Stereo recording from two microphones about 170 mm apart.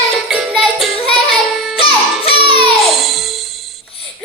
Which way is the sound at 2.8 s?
Centre (ahead or behind).